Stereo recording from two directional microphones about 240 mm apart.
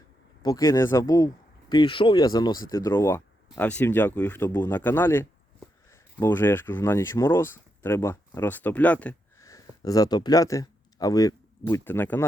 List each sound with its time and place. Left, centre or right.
0.4 s speech: centre